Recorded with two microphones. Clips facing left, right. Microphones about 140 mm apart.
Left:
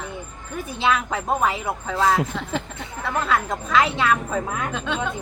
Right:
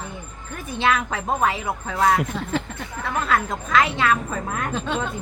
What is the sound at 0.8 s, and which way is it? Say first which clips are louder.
Speech: even; centre (ahead or behind).